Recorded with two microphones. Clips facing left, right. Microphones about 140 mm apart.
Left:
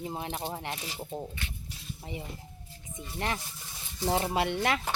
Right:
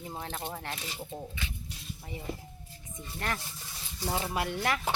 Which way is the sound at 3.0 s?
20° left (ahead or behind).